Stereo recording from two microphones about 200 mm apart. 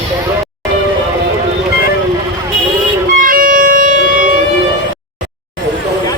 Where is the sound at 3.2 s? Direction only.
45° right (ahead or behind).